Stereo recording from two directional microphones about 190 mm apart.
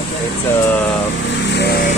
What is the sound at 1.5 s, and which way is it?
Vehicle, 55° left (ahead or behind).